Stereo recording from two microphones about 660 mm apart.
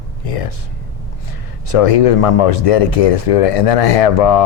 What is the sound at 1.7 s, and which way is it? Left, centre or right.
Speech, left.